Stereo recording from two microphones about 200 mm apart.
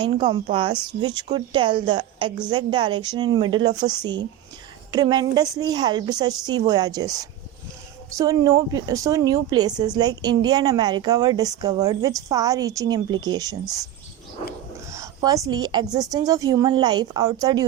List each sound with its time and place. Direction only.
0.3 s a woman's voice: 30° right (ahead or behind)
14.8 s a sound: 15° right (ahead or behind)
16.0 s a woman's voice: 20° right (ahead or behind)